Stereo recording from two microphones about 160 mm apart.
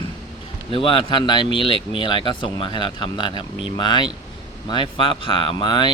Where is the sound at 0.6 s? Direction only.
35° left (ahead or behind).